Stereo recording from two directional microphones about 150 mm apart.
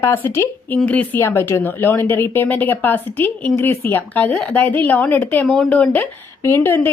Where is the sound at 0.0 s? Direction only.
15° left (ahead or behind).